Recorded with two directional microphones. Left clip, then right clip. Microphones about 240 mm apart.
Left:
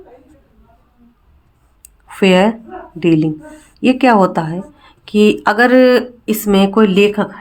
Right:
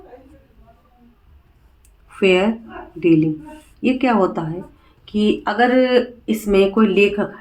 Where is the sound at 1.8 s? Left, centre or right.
Left.